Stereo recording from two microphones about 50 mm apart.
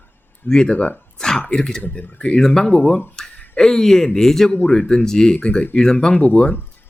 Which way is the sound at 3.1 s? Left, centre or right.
Centre.